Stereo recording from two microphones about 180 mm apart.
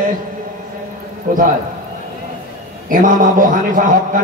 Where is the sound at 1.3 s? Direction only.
50° right (ahead or behind).